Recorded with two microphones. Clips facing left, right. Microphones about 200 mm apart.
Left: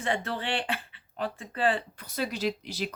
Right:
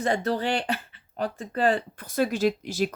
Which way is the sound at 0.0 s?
40° right (ahead or behind).